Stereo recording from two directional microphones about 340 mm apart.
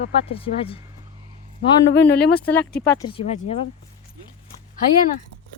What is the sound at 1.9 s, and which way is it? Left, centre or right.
Speech, left.